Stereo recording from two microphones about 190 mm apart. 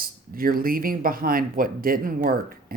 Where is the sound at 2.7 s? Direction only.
50° right (ahead or behind).